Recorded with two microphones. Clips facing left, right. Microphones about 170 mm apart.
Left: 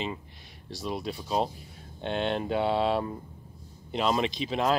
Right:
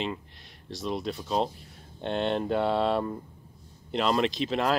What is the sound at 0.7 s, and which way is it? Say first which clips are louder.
Speech: right 2 dB; 5° left (ahead or behind).